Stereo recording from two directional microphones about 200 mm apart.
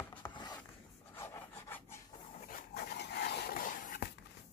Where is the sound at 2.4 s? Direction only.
50° left (ahead or behind).